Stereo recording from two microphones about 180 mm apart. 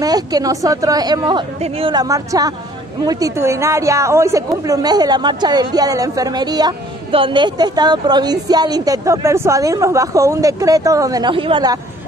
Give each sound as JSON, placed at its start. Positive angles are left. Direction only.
{"t": 0.0, "sound": "a woman's voice", "side_deg": -20}